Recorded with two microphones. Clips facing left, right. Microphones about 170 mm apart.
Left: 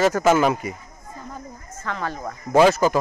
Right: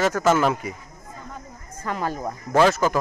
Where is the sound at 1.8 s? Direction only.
10° right (ahead or behind).